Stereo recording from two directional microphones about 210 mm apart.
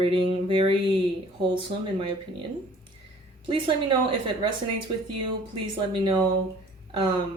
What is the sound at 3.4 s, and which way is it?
A woman's voice, 25° right (ahead or behind).